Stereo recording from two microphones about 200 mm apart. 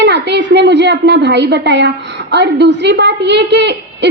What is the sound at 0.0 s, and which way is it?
A woman's voice, 60° right (ahead or behind).